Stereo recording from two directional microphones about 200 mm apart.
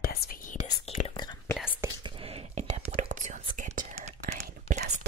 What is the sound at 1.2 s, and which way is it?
Whispering, 20° left (ahead or behind).